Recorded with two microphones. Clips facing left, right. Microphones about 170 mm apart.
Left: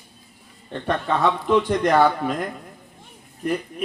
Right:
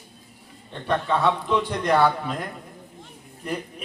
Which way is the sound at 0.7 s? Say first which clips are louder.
Left 1 dB; 55° left (ahead or behind).